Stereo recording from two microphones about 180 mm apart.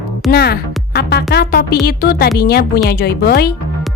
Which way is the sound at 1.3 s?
55° left (ahead or behind).